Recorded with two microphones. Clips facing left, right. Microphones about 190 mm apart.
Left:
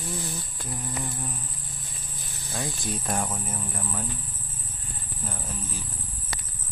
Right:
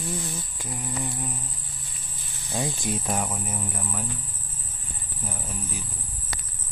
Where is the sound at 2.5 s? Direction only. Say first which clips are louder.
Right 4 dB; 15° right (ahead or behind).